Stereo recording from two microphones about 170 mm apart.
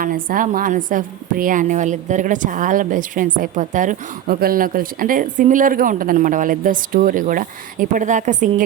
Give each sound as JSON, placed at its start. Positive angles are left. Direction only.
{"t": 0.0, "sound": "a woman's voice", "side_deg": -55}